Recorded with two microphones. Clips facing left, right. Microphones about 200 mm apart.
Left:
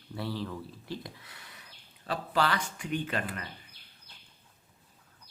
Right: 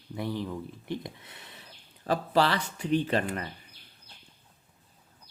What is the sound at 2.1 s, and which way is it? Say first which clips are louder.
Speech: right 4 dB; 35° right (ahead or behind).